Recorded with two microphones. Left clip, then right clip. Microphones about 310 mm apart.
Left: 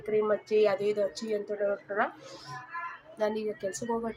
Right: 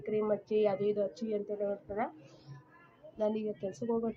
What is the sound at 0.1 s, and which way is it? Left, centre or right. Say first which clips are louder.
Speech: left 5 dB; right.